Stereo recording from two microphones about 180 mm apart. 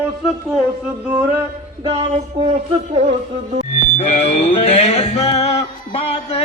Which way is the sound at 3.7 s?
35° left (ahead or behind).